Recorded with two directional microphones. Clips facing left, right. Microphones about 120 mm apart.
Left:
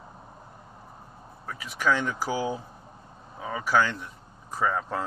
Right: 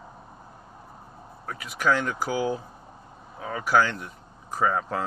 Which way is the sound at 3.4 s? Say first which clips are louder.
Even; 5° left (ahead or behind).